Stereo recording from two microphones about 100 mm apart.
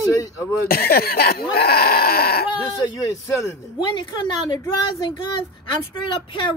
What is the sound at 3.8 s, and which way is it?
A woman's voice, 55° left (ahead or behind).